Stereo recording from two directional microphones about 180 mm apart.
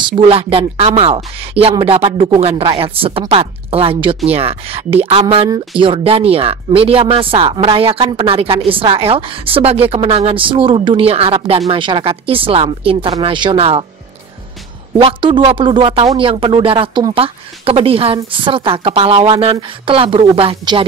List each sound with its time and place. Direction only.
0.0 s speech: 30° right (ahead or behind)
15.0 s speech: 30° right (ahead or behind)